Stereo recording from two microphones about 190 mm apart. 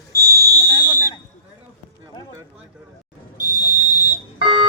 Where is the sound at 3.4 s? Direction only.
40° right (ahead or behind).